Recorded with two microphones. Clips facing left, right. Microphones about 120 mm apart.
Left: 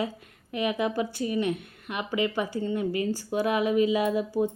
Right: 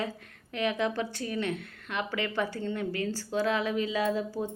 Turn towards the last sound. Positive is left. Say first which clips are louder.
# left 5 dB
turn(degrees=15)  # may be behind; listen again after turning